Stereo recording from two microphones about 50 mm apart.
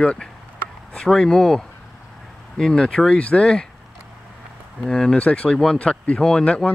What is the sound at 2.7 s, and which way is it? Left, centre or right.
Speech, centre.